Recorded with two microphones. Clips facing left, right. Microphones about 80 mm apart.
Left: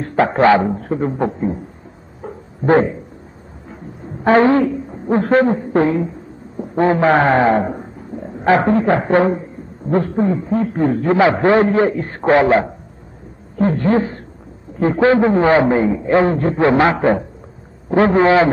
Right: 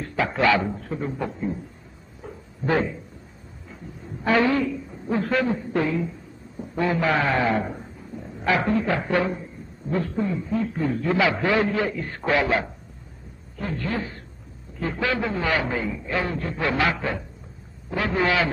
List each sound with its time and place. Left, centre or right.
0.0 s a man's voice: left
2.2 s a sound: left
4.2 s a woman's voice: left